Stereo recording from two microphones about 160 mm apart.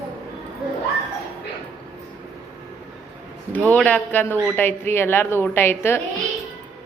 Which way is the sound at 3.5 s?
10° left (ahead or behind).